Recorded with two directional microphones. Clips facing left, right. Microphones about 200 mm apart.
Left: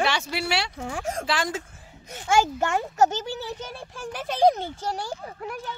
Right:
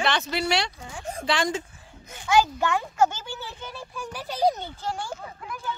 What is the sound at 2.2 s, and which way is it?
A child's voice, 45° left (ahead or behind).